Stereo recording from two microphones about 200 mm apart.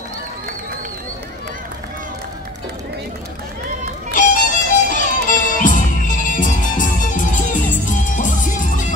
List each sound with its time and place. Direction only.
4.1 s music: 40° left (ahead or behind)